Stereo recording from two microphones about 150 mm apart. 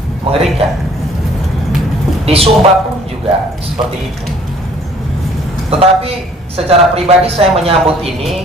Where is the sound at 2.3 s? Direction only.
40° right (ahead or behind).